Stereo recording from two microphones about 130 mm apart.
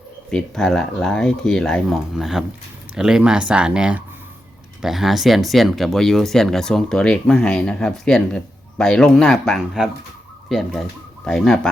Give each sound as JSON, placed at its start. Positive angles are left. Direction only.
{"t": 0.3, "sound": "speech", "side_deg": 5}